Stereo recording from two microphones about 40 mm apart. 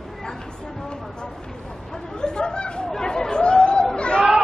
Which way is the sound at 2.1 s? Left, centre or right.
Left.